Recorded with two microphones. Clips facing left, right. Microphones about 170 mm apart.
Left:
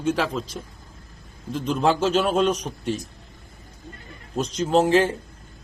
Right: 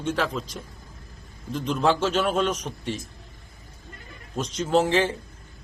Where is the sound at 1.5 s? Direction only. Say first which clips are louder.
Left 1 dB; 35° left (ahead or behind).